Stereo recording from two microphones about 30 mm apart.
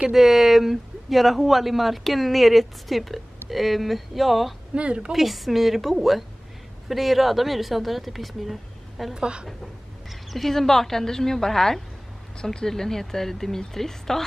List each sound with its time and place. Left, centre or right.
0.1 s speech: centre
4.7 s a woman's voice: right
5.1 s speech: centre
9.1 s a woman's voice: right
10.0 s a sound: centre
10.5 s speech: centre